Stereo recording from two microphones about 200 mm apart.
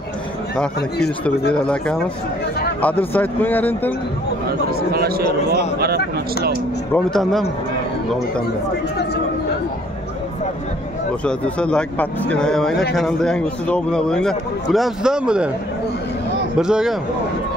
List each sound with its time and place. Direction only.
1.5 s a man's voice: 5° left (ahead or behind)
4.9 s a man's voice: 50° right (ahead or behind)
6.9 s a man's voice: 5° left (ahead or behind)
11.2 s a man's voice: 5° left (ahead or behind)
16.5 s a man's voice: 5° right (ahead or behind)